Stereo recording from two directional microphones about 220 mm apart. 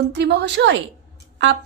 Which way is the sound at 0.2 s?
50° right (ahead or behind).